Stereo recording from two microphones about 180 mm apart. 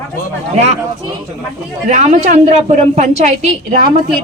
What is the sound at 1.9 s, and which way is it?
A woman's voice, 40° right (ahead or behind).